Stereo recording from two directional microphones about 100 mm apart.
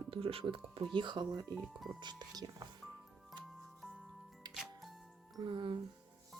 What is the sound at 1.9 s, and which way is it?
Speech, 45° right (ahead or behind).